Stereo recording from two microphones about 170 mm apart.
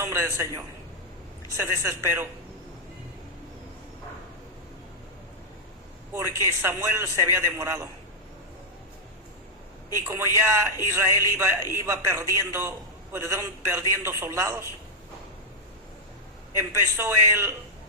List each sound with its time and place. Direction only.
0.0 s a man's voice: 15° right (ahead or behind)
6.1 s a man's voice: 15° right (ahead or behind)
10.1 s a man's voice: 15° right (ahead or behind)
16.7 s a man's voice: 15° right (ahead or behind)